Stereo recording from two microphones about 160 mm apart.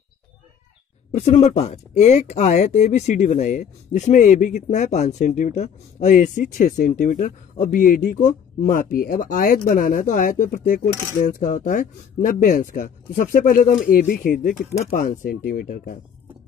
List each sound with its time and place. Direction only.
1.1 s speech: 40° left (ahead or behind); by 8.3 s 55° left (ahead or behind)
8.7 s speech: 70° left (ahead or behind)
10.9 s cutlery: 20° left (ahead or behind)
11.1 s speech: 55° left (ahead or behind)